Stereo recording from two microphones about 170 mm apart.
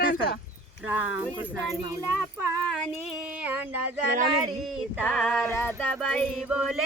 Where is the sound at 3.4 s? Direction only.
10° right (ahead or behind).